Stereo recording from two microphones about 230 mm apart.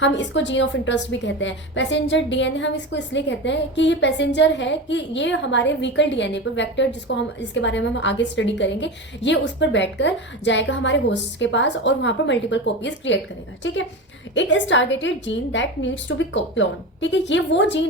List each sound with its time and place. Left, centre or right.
0.0 s a woman's voice: left